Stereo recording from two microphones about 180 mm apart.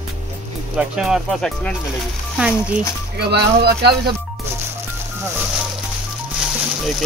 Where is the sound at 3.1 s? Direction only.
65° right (ahead or behind).